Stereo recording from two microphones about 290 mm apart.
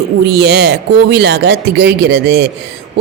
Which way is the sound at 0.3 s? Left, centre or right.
Right.